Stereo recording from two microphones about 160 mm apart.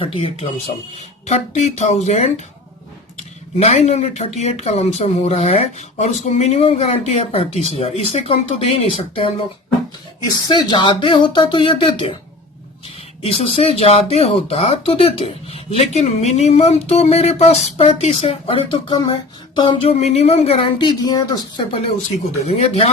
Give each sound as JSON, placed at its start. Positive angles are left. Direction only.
{"t": 0.0, "sound": "speech", "side_deg": 35}
{"t": 3.6, "sound": "speech", "side_deg": 45}
{"t": 13.2, "sound": "speech", "side_deg": 35}
{"t": 22.4, "sound": "speech", "side_deg": 40}